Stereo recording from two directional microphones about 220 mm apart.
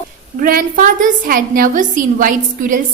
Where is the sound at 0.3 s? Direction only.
40° right (ahead or behind).